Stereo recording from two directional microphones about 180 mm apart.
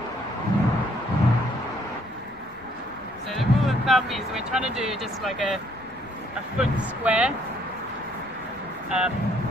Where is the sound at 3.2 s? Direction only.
Centre (ahead or behind).